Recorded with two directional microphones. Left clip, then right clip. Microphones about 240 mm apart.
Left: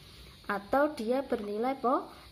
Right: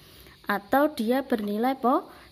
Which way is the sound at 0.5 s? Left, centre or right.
Right.